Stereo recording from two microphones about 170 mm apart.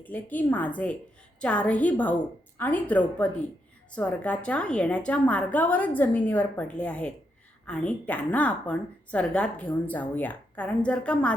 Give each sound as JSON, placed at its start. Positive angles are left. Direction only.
{"t": 0.0, "sound": "speech", "side_deg": 10}